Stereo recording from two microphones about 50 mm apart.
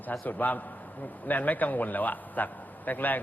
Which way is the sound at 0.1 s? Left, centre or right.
Left.